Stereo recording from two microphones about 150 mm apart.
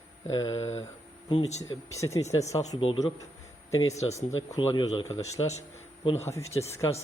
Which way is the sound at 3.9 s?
45° left (ahead or behind).